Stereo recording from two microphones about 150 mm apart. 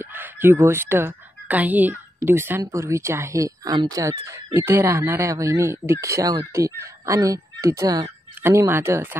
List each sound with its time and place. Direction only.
0.0 s speech: 15° right (ahead or behind)